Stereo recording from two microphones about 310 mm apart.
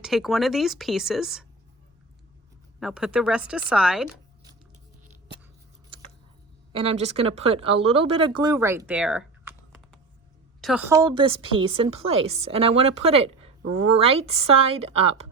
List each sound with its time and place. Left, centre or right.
0.0 s speech: centre
2.8 s speech: centre
6.7 s a woman's voice: centre